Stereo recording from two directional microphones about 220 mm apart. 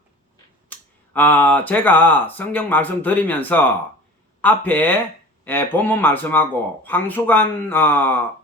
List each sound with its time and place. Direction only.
0.7 s speech: 10° left (ahead or behind)